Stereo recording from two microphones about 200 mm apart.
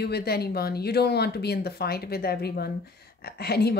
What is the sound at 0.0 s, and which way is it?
Speech, 55° left (ahead or behind).